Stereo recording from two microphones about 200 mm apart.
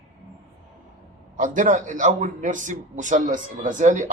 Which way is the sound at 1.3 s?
40° right (ahead or behind).